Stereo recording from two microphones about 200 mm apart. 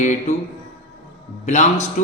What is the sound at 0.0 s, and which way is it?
Speech, 35° left (ahead or behind).